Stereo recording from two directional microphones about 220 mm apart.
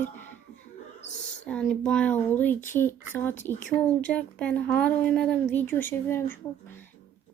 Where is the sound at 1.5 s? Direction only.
5° left (ahead or behind).